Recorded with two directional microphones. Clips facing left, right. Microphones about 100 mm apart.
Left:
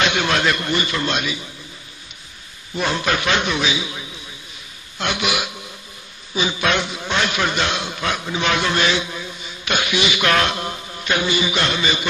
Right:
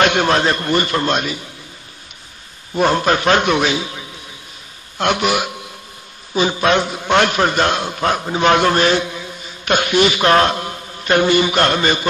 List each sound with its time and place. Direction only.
0.0 s a sound: 50° right (ahead or behind)
0.3 s a man's voice: 35° right (ahead or behind)
2.7 s a man's voice: 45° right (ahead or behind)
4.9 s a man's voice: 50° right (ahead or behind)
7.1 s a man's voice: 50° right (ahead or behind)
11.1 s a man's voice: 50° right (ahead or behind)